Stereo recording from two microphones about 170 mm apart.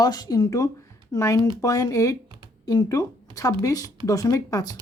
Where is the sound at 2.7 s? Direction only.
20° left (ahead or behind).